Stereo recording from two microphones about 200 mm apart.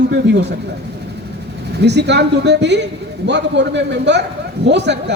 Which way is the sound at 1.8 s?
60° right (ahead or behind).